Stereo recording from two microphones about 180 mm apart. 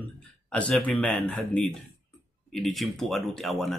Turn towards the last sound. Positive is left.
turn(degrees=0)  # may be behind; listen again after turning